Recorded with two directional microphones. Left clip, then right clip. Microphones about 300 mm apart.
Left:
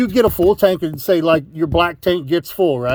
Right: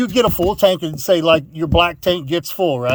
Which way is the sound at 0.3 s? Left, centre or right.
Left.